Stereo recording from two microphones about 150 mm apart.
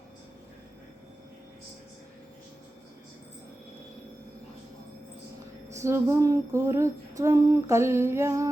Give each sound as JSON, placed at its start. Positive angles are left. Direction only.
{"t": 5.8, "sound": "female singing", "side_deg": -20}